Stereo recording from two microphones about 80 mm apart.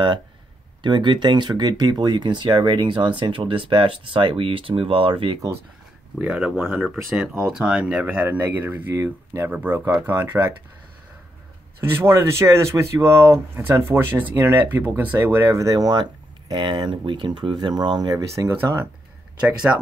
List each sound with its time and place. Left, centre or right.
0.8 s speech: right
6.2 s speech: centre; by 8.9 s right
8.9 s speech: right
9.5 s speech: right
11.9 s speech: right
15.1 s speech: right
18.3 s speech: right